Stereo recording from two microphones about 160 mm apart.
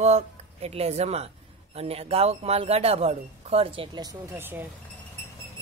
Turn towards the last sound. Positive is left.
turn(degrees=-15)  # may be behind; listen again after turning